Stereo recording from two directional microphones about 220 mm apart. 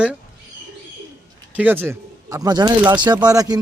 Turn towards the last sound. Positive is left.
turn(degrees=-15)  # may be behind; listen again after turning